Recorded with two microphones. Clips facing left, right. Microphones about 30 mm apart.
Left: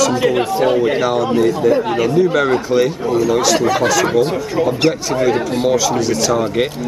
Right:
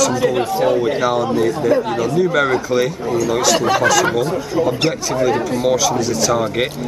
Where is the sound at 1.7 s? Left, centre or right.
Left.